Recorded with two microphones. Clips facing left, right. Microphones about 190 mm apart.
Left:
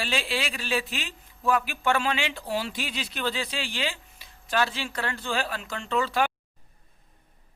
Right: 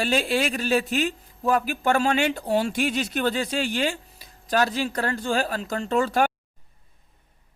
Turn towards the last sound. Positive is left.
turn(degrees=-45)  # may be behind; listen again after turning